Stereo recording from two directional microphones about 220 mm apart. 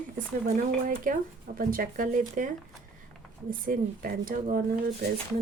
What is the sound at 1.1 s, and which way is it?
Speech, 40° right (ahead or behind).